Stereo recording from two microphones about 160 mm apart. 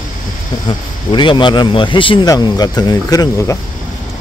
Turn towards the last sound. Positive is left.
turn(degrees=20)  # may be behind; listen again after turning